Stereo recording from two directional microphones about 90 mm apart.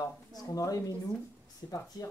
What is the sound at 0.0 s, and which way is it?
Speech, 45° left (ahead or behind).